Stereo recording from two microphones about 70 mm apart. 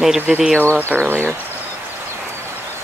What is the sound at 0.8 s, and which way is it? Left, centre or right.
Speech, right.